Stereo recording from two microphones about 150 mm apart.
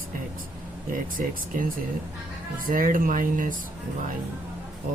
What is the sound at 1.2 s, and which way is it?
Speech, 60° right (ahead or behind).